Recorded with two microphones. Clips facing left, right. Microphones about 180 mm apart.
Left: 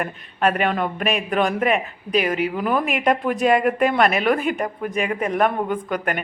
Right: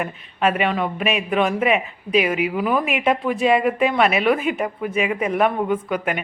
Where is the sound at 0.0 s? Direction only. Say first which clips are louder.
Even; 5° right (ahead or behind).